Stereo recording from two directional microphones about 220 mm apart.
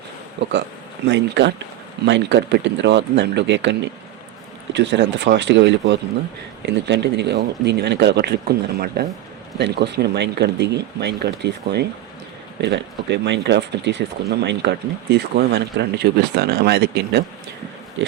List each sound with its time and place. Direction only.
1.0 s speech: 50° right (ahead or behind)